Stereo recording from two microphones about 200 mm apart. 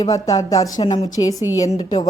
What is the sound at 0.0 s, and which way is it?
A woman's voice, 20° left (ahead or behind).